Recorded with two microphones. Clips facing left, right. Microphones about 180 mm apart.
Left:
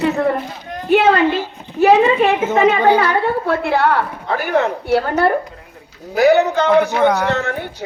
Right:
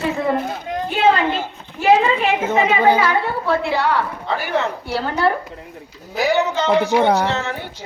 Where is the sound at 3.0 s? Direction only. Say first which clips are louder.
Left 2 dB; 55° left (ahead or behind).